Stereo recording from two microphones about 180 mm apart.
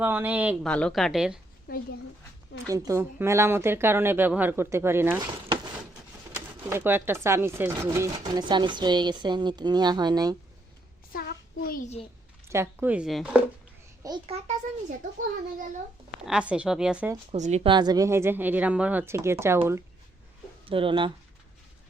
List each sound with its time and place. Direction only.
0.0 s speech: 10° right (ahead or behind)
0.6 s a woman's voice: 5° left (ahead or behind)
1.7 s speech: 55° left (ahead or behind)
2.6 s speech: 20° right (ahead or behind)
6.3 s speech: 10° right (ahead or behind)
11.1 s child singing: 55° left (ahead or behind)
12.5 s speech: 10° right (ahead or behind)
14.3 s a child's voice: 40° right (ahead or behind)
16.2 s a woman's voice: 5° right (ahead or behind)
17.3 s speech: 40° right (ahead or behind); by 19.5 s 15° right (ahead or behind)
20.7 s speech: 30° right (ahead or behind)